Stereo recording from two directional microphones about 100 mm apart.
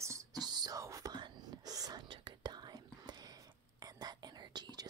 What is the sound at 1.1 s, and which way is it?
Whispering, 45° right (ahead or behind).